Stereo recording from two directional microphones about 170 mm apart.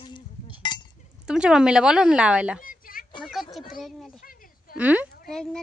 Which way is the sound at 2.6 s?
55° left (ahead or behind).